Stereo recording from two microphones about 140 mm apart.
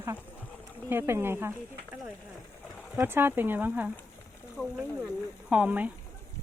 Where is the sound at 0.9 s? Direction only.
15° right (ahead or behind).